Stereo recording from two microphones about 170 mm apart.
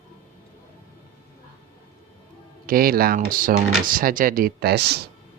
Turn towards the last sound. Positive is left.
turn(degrees=-70)  # may be behind; listen again after turning